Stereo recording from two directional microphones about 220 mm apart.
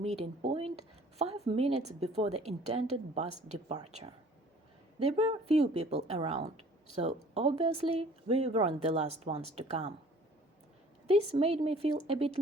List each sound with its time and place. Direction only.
0.0 s speech: 30° right (ahead or behind)
4.9 s speech: 30° right (ahead or behind)
11.0 s speech: 25° right (ahead or behind)